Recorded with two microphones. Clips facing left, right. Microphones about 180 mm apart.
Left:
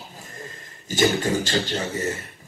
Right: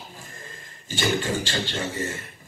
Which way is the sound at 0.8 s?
40° left (ahead or behind).